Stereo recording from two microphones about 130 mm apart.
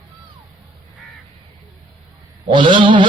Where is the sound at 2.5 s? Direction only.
40° right (ahead or behind).